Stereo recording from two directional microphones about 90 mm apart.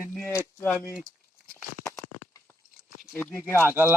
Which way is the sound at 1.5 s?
35° left (ahead or behind).